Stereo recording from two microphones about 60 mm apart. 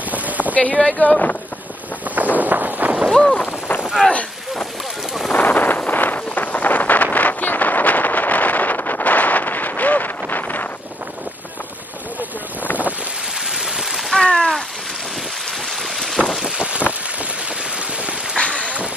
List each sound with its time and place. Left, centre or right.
0.1 s boat: right
0.6 s speech: left
2.3 s a sound: right
3.1 s speech: centre
4.1 s boat: centre
5.3 s wind noise: left
13.5 s rain: centre
14.1 s a sound: centre
16.3 s boat: centre
18.3 s a sound: centre